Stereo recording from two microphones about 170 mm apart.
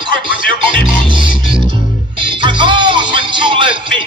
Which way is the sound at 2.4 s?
25° right (ahead or behind).